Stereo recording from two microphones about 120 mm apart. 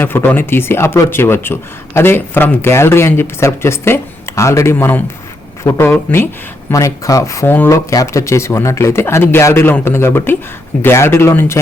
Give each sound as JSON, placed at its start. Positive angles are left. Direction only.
{"t": 0.0, "sound": "speech", "side_deg": 15}